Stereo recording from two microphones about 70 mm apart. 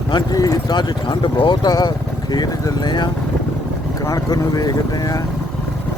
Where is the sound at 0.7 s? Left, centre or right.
Left.